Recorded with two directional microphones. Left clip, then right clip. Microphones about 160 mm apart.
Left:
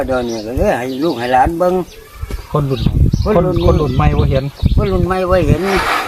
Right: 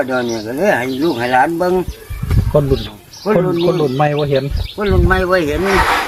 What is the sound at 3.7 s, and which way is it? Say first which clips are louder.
Speech: right 1 dB; 45° left (ahead or behind).